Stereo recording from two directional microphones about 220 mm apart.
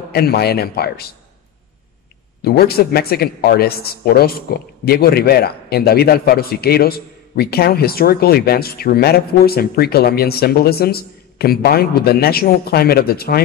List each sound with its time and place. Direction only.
0.1 s a man's voice: 45° left (ahead or behind)
2.4 s a man's voice: 45° left (ahead or behind)